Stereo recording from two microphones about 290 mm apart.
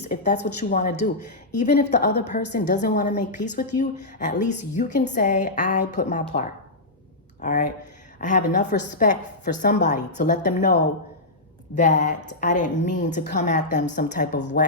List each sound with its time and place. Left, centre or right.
0.0 s a woman's voice: left
7.4 s a woman's voice: left
11.8 s a woman's voice: left